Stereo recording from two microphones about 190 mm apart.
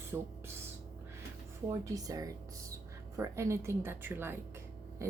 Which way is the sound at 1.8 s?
20° right (ahead or behind).